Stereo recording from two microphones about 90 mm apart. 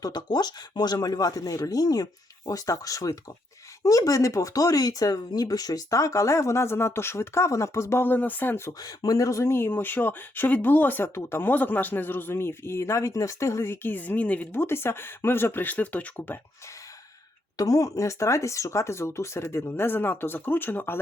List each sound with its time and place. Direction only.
0.0 s speech: 50° left (ahead or behind); by 8.7 s 25° left (ahead or behind)
8.8 s speech: 45° left (ahead or behind); by 16.4 s 25° left (ahead or behind)
17.6 s speech: 40° left (ahead or behind); by 21.0 s 25° left (ahead or behind)